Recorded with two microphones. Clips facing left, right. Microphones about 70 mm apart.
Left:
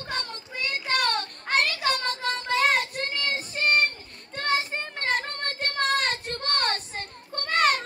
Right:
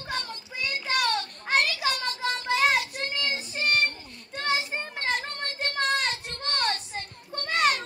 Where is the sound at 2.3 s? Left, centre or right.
Centre.